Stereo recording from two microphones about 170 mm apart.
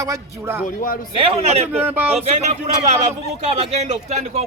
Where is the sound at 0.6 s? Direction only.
55° left (ahead or behind).